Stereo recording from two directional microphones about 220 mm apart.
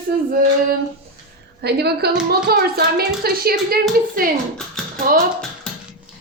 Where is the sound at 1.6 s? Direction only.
45° right (ahead or behind).